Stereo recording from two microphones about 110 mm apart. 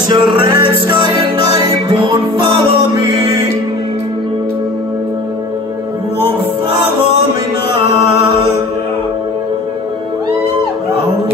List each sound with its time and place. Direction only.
0.1 s music: 45° right (ahead or behind)